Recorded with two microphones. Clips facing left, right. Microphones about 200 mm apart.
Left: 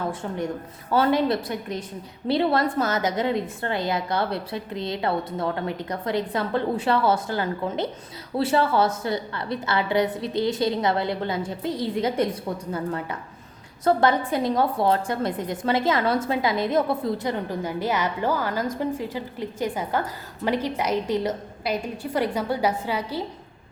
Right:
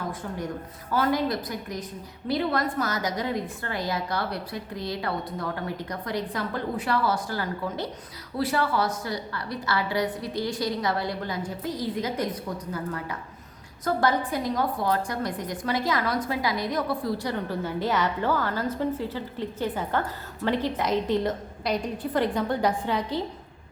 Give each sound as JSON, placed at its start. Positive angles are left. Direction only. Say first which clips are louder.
{"t": 0.1, "sound": "a woman's voice", "louder": "left 4 dB", "side_deg": 25}